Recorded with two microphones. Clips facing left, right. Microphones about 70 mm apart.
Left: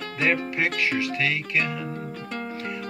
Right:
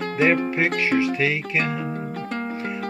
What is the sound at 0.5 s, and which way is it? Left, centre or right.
Music, right.